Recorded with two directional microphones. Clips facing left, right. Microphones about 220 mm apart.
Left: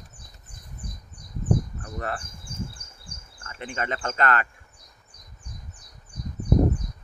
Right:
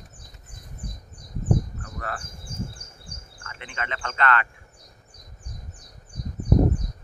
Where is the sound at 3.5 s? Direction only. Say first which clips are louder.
Left 4 dB; 40° left (ahead or behind).